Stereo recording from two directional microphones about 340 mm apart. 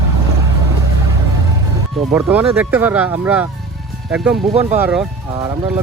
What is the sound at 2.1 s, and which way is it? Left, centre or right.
Speech, centre.